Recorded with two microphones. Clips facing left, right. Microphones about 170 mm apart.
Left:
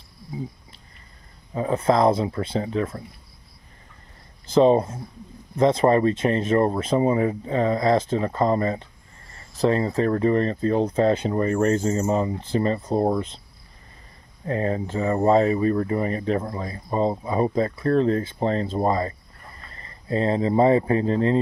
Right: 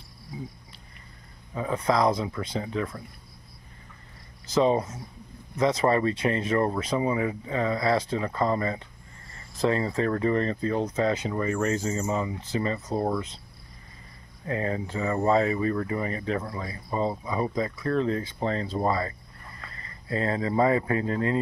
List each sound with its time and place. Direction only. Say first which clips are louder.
1.5 s speech: left 5 dB; 25° left (ahead or behind)
4.6 s speech: left 6 dB; 30° left (ahead or behind)
7.0 s speech: left 7 dB; 40° left (ahead or behind)
11.7 s speech: left 6 dB; 50° left (ahead or behind)
12.1 s speech: left 6 dB; 40° left (ahead or behind)
14.4 s speech: left 4 dB; 30° left (ahead or behind)